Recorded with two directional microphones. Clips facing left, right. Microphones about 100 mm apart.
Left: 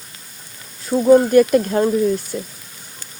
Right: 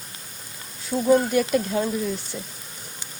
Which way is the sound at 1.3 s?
50° left (ahead or behind).